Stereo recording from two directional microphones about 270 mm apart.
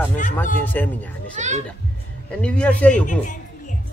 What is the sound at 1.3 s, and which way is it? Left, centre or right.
Speech, right.